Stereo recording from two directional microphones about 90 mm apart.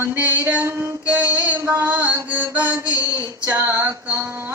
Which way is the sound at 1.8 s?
20° right (ahead or behind).